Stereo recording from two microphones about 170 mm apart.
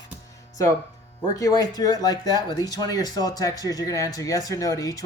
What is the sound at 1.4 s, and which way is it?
Speech, 20° left (ahead or behind).